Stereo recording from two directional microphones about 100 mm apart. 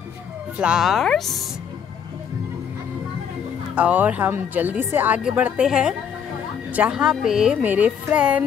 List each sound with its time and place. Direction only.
0.6 s speech: 5° right (ahead or behind)
3.7 s speech: 15° right (ahead or behind)
7.6 s speech: 15° right (ahead or behind)